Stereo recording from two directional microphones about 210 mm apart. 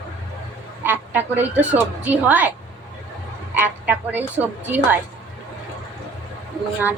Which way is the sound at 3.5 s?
10° right (ahead or behind).